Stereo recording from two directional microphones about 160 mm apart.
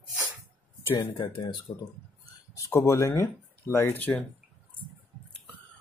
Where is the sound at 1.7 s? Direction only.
20° left (ahead or behind).